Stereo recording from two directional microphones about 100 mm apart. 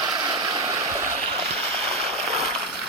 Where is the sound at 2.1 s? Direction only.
90° right.